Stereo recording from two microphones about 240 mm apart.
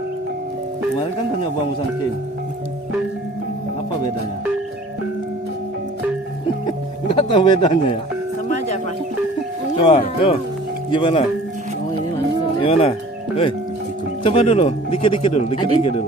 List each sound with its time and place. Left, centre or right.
7.1 s speech: centre
8.4 s music: left
9.7 s speech: left
12.6 s speech: left